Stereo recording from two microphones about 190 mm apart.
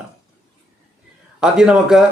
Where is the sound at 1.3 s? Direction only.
5° right (ahead or behind).